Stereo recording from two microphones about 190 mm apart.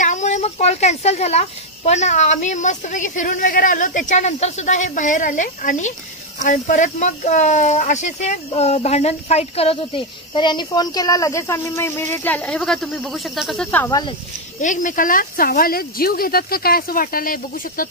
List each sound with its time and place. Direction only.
0.0 s a child's voice: 40° left (ahead or behind); by 13.9 s 10° left (ahead or behind)
14.6 s speech: 40° left (ahead or behind)